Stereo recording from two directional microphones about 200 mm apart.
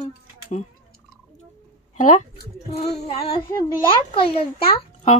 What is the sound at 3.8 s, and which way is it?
Speech, 25° left (ahead or behind).